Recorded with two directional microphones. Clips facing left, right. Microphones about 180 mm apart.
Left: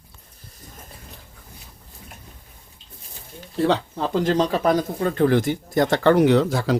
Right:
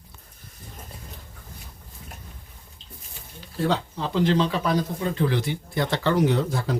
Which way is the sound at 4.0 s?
45° left (ahead or behind).